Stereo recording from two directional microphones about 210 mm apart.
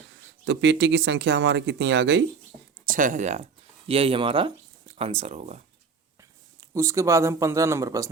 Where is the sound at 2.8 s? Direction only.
40° right (ahead or behind).